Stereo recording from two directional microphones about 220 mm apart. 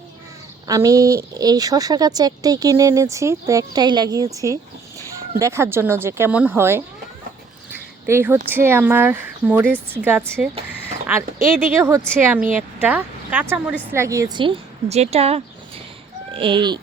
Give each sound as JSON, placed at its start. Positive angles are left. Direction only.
{"t": 0.7, "sound": "a woman's voice", "side_deg": -15}
{"t": 7.7, "sound": "a sound", "side_deg": -10}
{"t": 8.4, "sound": "a woman's voice", "side_deg": -10}